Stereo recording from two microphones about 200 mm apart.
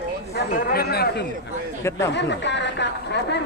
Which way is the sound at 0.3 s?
50° left (ahead or behind).